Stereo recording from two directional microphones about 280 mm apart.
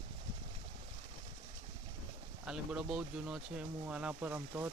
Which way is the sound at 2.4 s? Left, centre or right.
Centre.